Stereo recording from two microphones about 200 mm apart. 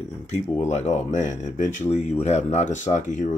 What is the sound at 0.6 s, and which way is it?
Speech, 35° left (ahead or behind).